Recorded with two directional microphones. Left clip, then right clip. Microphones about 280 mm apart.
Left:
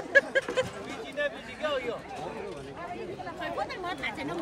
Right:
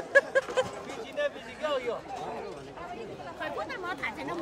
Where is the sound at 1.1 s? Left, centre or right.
Right.